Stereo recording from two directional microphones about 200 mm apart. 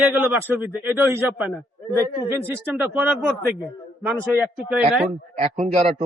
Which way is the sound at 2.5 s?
10° right (ahead or behind).